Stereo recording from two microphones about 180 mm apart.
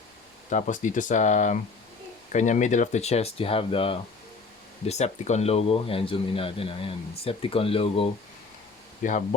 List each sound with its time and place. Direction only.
0.5 s speech: 45° left (ahead or behind)
9.0 s speech: 45° left (ahead or behind)